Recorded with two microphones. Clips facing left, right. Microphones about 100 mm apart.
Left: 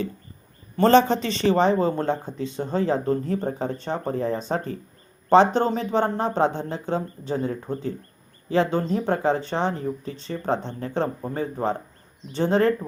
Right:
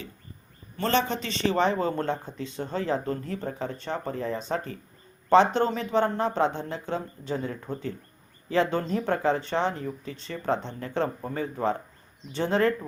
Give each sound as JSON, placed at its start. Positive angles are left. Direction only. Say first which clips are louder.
{"t": 0.8, "sound": "speech", "louder": "left 9 dB", "side_deg": 40}
{"t": 12.3, "sound": "speech", "louder": "left 4 dB", "side_deg": 30}